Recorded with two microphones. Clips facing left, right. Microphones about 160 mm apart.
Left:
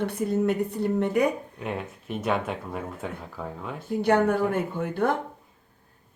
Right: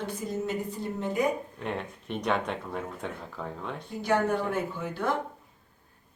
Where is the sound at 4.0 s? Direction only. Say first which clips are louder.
Left 5 dB; 60° left (ahead or behind).